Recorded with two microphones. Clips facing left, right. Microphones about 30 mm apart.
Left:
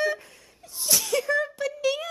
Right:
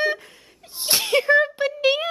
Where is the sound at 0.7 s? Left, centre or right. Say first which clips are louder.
Right 5 dB; right.